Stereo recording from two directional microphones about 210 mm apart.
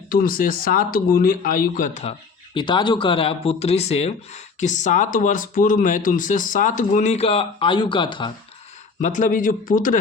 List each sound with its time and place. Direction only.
0.1 s speech: 45° left (ahead or behind)
2.6 s speech: 20° left (ahead or behind)
9.0 s speech: 35° left (ahead or behind)